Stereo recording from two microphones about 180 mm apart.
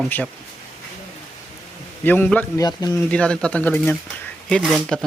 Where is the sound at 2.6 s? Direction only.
20° left (ahead or behind).